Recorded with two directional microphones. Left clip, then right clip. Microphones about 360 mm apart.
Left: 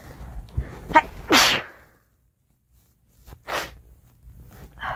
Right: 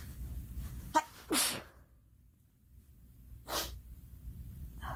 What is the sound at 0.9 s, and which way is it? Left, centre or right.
Sneeze, left.